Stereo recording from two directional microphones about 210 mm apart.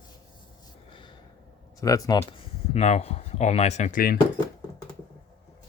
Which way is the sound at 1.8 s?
15° left (ahead or behind).